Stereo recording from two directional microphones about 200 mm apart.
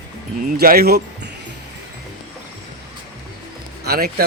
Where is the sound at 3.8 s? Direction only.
50° right (ahead or behind).